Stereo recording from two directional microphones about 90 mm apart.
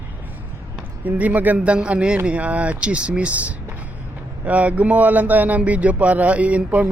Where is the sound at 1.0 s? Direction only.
20° right (ahead or behind).